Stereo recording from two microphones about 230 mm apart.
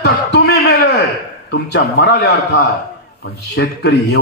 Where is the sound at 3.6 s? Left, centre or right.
Left.